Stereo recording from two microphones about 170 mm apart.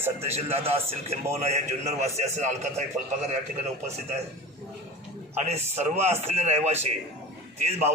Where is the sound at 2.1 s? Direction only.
40° right (ahead or behind).